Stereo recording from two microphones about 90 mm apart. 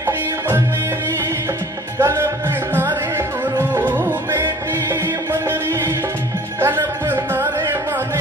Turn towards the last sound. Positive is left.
turn(degrees=-25)  # may be behind; listen again after turning